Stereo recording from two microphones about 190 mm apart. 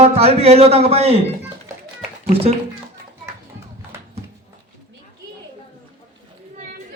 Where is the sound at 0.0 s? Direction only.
30° right (ahead or behind).